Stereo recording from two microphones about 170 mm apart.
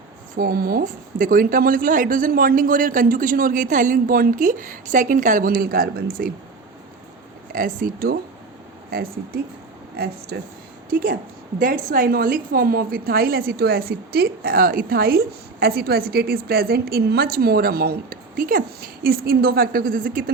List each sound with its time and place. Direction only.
0.3 s a woman's voice: 65° right (ahead or behind)
7.5 s a woman's voice: 55° right (ahead or behind)
10.0 s speech: 65° right (ahead or behind)
11.6 s a woman's voice: 55° right (ahead or behind)